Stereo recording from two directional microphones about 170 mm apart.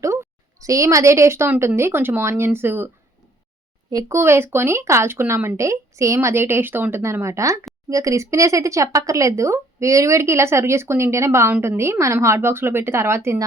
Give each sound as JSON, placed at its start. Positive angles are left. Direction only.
{"t": 0.0, "sound": "a woman's voice", "side_deg": -15}